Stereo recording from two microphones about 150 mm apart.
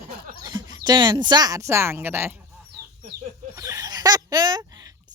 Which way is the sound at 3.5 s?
20° right (ahead or behind).